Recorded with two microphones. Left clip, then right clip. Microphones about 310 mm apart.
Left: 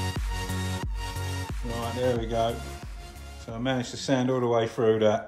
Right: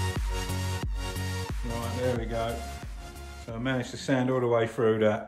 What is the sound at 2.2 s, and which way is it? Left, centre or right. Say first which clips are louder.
Speech: left 4 dB; centre.